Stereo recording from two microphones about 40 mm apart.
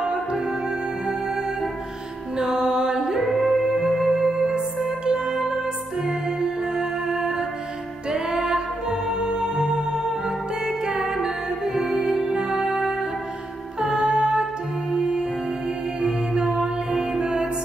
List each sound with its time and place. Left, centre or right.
2.3 s music: centre
3.2 s music: centre
13.7 s music: centre